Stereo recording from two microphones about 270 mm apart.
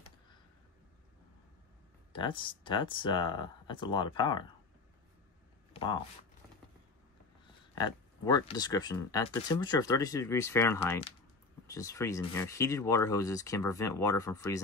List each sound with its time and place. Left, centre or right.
2.1 s speech: centre
5.7 s a sound: centre
7.7 s speech: centre